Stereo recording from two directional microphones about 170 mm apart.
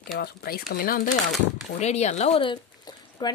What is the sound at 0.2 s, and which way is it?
Speech, 60° left (ahead or behind).